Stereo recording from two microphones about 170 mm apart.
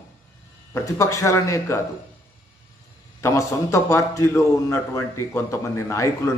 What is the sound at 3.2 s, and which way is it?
A man's voice, 15° left (ahead or behind).